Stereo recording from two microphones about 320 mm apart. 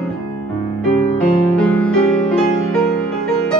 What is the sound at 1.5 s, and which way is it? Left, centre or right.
Music, centre.